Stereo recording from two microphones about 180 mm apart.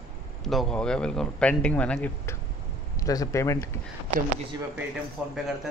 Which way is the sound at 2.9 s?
20° left (ahead or behind).